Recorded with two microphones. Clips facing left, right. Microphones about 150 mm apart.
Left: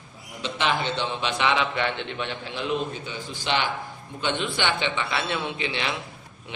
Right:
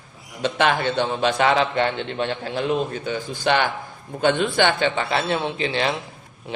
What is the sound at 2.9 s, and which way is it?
A man's voice, 50° right (ahead or behind).